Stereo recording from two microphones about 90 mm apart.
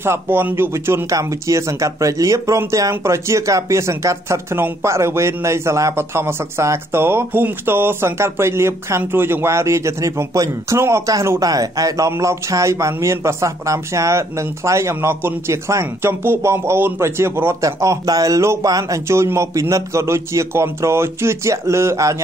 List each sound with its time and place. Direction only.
0.0 s speech: 25° right (ahead or behind)
1.1 s speech: 35° right (ahead or behind)